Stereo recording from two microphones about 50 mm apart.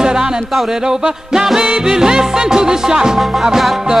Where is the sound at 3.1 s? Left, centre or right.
Centre.